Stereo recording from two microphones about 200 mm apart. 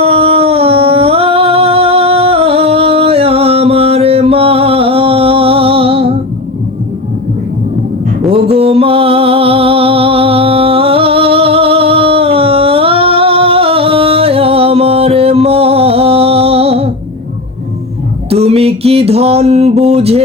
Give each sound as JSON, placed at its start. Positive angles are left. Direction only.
{"t": 0.0, "sound": "humming", "side_deg": -30}
{"t": 8.3, "sound": "music", "side_deg": -30}
{"t": 18.3, "sound": "a sound", "side_deg": -30}